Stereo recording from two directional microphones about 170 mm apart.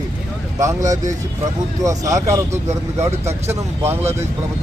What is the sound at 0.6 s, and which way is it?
Speech, 20° right (ahead or behind).